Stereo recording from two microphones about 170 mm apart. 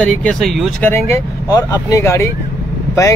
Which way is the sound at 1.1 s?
20° left (ahead or behind).